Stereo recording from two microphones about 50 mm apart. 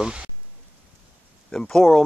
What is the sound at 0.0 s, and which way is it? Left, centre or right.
Speech, centre.